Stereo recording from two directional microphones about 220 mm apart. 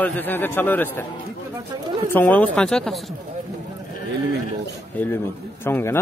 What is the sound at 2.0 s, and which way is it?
Speech, 10° left (ahead or behind).